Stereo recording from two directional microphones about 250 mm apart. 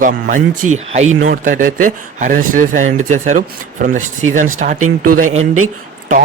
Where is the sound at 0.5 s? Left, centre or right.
Right.